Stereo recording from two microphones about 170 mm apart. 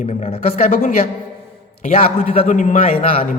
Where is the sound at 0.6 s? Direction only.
50° left (ahead or behind).